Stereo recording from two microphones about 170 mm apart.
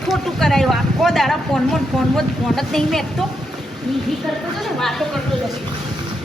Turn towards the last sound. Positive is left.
turn(degrees=0)  # may be behind; listen again after turning